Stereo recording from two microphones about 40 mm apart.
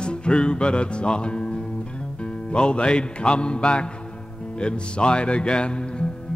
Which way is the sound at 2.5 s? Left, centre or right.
Left.